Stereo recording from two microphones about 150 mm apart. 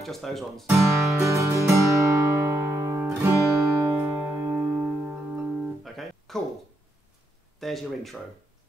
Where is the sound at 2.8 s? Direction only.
20° right (ahead or behind).